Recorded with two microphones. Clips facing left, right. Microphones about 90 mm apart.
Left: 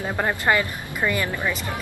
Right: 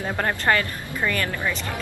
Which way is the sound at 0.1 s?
10° left (ahead or behind).